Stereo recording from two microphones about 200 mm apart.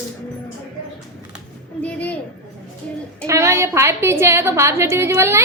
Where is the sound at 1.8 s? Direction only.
5° left (ahead or behind).